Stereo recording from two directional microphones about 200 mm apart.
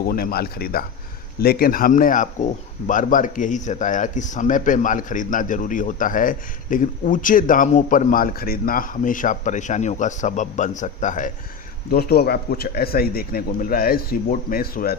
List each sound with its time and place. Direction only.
0.1 s a man's voice: 50° left (ahead or behind)
11.9 s a man's voice: 50° left (ahead or behind)